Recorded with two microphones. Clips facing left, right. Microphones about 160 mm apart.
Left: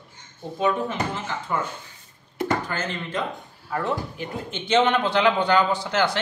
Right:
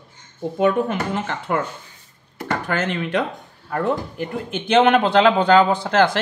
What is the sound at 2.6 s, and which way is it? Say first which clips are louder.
Speech: right 7 dB; 65° right (ahead or behind).